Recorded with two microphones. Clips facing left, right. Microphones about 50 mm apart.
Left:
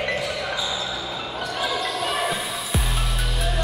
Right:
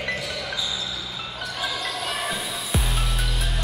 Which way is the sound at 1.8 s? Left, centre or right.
Centre.